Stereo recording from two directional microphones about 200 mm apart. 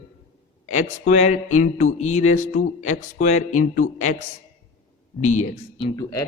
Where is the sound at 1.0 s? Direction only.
35° left (ahead or behind).